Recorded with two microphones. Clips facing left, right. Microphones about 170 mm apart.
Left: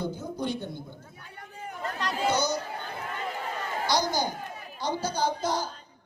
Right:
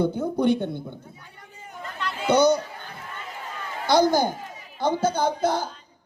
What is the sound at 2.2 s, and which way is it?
Speech, 60° right (ahead or behind).